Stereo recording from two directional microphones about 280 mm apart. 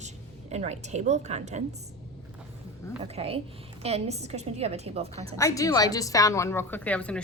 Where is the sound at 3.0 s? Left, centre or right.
Right.